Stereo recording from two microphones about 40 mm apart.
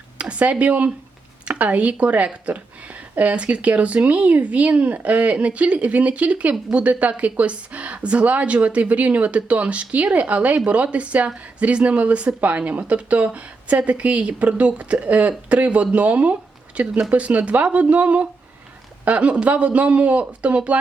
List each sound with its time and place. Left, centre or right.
0.2 s a woman's voice: right